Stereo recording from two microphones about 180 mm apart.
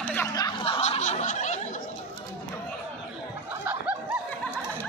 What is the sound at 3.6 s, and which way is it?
Snicker, 5° right (ahead or behind).